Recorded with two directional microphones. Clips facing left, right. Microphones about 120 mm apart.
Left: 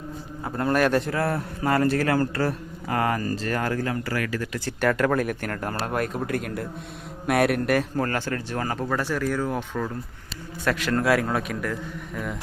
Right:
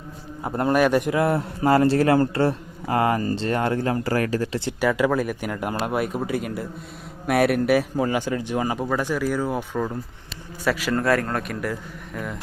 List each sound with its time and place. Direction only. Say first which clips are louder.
0.4 s a man's voice: right 3 dB; 20° right (ahead or behind)
0.7 s a man's voice: right 3 dB; 10° right (ahead or behind); by 4.6 s 35° right (ahead or behind)
4.8 s a man's voice: right 1 dB; 5° right (ahead or behind)